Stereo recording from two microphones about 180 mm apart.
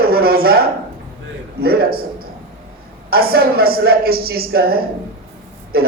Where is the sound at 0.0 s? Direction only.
60° right (ahead or behind).